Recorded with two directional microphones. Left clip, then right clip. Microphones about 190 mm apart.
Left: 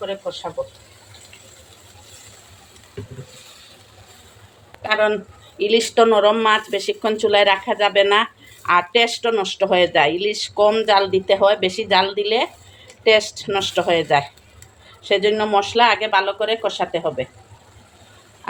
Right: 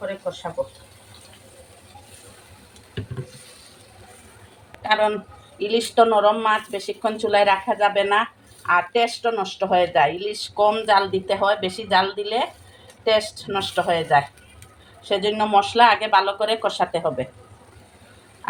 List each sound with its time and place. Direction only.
4.8 s speech: 25° left (ahead or behind)